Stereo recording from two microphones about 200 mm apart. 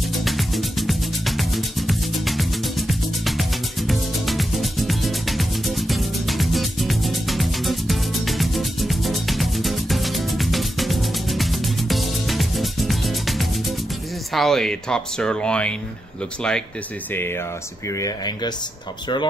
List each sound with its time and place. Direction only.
0.1 s music: centre (ahead or behind)
14.3 s speech: centre (ahead or behind)
17.1 s speech: 10° left (ahead or behind)